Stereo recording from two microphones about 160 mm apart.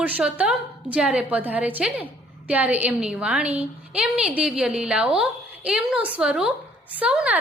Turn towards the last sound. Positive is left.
turn(degrees=-5)  # may be behind; listen again after turning